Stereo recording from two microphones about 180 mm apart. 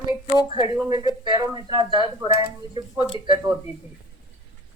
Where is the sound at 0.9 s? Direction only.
25° right (ahead or behind).